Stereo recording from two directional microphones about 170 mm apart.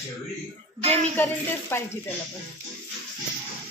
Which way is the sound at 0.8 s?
35° right (ahead or behind).